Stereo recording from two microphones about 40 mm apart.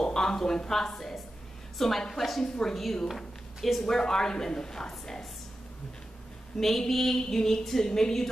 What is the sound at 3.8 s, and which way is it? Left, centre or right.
Speech, centre.